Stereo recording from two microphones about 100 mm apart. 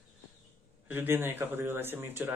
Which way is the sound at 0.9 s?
20° right (ahead or behind).